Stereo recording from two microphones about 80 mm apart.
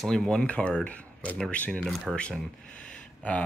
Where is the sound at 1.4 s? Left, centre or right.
Centre.